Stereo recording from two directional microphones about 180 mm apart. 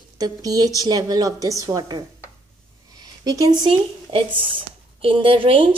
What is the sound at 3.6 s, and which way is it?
Speech, 30° right (ahead or behind).